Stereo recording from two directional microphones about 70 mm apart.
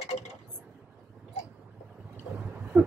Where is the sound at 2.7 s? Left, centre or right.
Right.